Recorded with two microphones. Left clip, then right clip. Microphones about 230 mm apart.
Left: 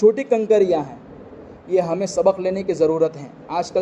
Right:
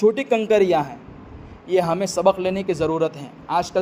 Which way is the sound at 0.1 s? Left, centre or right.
Right.